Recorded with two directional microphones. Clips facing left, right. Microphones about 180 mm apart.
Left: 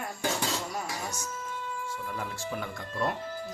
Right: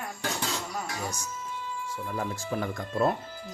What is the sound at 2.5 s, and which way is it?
Speech, 40° right (ahead or behind).